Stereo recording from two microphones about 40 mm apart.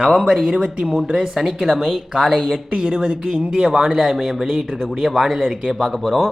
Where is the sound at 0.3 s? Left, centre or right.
Centre.